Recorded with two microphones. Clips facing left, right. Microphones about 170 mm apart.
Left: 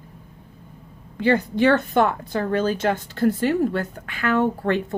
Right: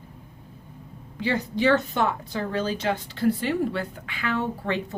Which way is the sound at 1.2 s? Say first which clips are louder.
Left 5 dB; 55° left (ahead or behind).